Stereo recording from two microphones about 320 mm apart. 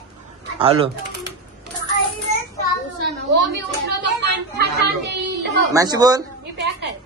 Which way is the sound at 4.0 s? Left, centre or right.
Right.